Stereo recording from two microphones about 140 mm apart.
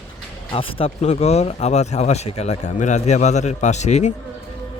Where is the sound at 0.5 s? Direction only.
40° left (ahead or behind).